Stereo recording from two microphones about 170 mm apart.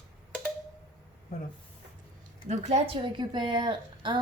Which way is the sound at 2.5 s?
40° right (ahead or behind).